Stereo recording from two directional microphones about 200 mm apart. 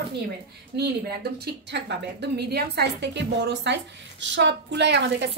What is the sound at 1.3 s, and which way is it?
A woman's voice, 55° right (ahead or behind).